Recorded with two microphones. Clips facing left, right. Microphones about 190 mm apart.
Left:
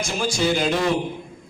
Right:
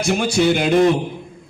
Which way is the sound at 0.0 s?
65° right (ahead or behind).